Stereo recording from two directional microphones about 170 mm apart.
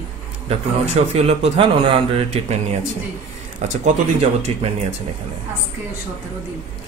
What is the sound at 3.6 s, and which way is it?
Speech, 45° right (ahead or behind).